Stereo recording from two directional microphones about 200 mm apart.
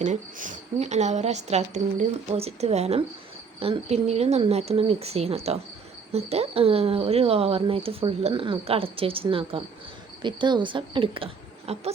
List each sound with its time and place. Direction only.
0.0 s a woman's voice: 40° right (ahead or behind)